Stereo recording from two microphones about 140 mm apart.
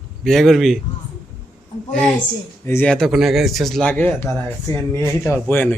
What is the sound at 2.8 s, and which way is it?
A man's voice, centre (ahead or behind).